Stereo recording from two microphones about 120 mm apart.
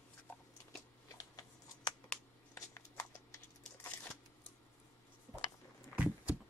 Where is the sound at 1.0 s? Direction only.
30° left (ahead or behind).